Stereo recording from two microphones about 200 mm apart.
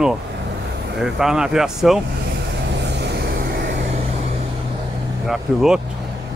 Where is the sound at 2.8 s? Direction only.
60° right (ahead or behind).